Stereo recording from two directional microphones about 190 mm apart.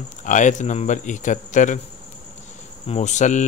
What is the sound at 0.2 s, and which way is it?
Speech, 40° left (ahead or behind).